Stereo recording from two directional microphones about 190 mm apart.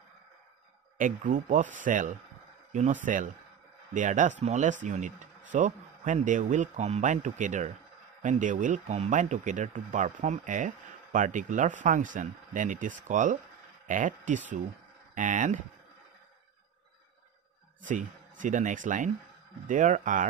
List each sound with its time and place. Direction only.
0.9 s speech: 45° right (ahead or behind)
17.8 s speech: 40° right (ahead or behind)